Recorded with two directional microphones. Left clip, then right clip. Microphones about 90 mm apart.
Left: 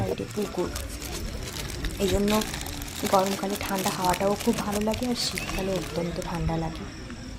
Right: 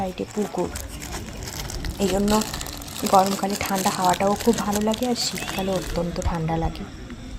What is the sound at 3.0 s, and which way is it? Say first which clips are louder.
Speech: right 5 dB; 90° right.